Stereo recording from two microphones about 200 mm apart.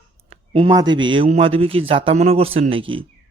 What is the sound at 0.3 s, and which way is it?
A man's voice, 30° right (ahead or behind).